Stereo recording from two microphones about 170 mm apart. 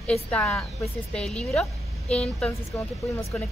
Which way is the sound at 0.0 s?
5° left (ahead or behind).